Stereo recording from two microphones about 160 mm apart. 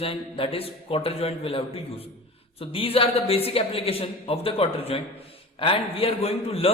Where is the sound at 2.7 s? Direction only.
35° left (ahead or behind).